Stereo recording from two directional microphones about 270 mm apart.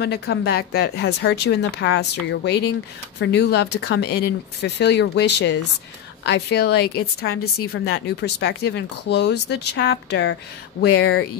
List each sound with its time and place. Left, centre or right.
0.0 s a woman's voice: left